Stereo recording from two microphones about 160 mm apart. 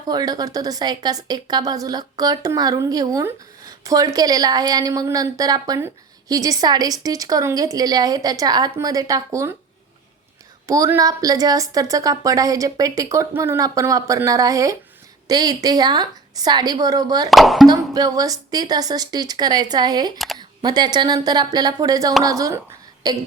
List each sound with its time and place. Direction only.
0.1 s a woman's voice: 25° right (ahead or behind)
10.7 s a woman's voice: 20° right (ahead or behind)
17.3 s speech: centre (ahead or behind)
17.7 s a woman's voice: 25° right (ahead or behind)
20.1 s speech: centre (ahead or behind)
20.6 s a woman's voice: 25° right (ahead or behind)